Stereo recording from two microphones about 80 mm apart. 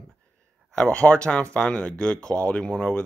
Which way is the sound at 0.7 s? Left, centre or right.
Centre.